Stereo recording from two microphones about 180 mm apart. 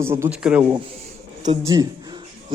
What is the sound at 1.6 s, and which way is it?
Speech, 20° right (ahead or behind).